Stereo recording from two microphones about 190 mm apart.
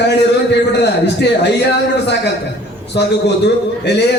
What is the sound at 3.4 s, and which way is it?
Speech, 65° left (ahead or behind).